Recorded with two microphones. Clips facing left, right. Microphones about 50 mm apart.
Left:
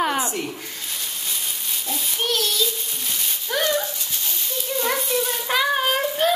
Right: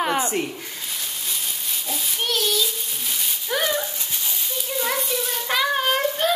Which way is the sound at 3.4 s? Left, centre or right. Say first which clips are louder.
Left 1 dB; centre.